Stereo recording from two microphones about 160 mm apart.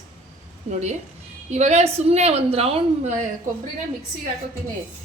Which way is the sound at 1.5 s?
45° right (ahead or behind).